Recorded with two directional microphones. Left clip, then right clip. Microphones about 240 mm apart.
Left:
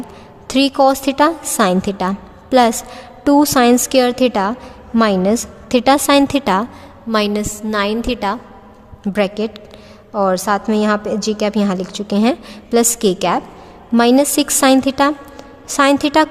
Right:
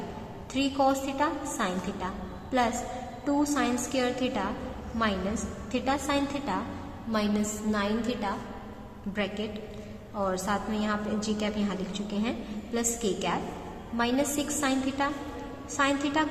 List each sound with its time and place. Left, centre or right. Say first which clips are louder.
0.4 s a woman's voice: left 14 dB; left